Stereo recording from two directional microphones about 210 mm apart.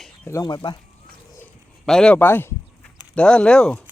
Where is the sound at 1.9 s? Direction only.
5° left (ahead or behind).